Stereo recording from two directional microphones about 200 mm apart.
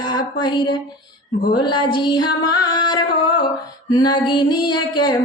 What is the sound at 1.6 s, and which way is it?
Music, 20° left (ahead or behind).